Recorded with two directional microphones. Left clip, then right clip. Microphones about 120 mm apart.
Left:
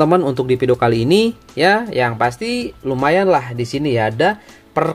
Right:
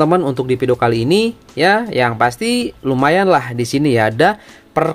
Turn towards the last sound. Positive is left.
turn(degrees=-25)  # may be behind; listen again after turning